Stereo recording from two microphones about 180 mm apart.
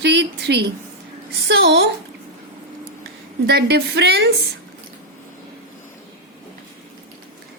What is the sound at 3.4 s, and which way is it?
Speech, 65° right (ahead or behind).